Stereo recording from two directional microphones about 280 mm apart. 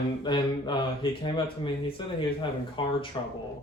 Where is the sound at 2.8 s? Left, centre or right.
Centre.